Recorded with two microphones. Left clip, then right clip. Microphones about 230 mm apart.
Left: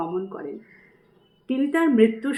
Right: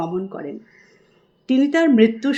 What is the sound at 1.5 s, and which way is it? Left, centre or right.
Speech, right.